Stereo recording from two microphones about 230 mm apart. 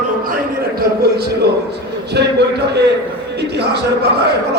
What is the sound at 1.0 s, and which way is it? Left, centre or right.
Speech, right.